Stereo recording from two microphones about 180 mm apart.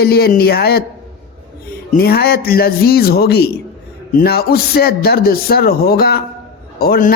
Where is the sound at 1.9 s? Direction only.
60° left (ahead or behind).